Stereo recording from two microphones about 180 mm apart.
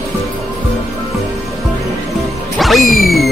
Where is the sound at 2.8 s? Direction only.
50° left (ahead or behind).